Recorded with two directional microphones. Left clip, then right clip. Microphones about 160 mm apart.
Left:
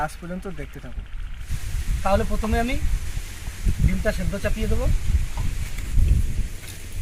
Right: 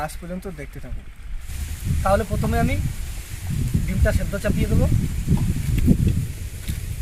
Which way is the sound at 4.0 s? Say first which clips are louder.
Right 1 dB; 10° right (ahead or behind).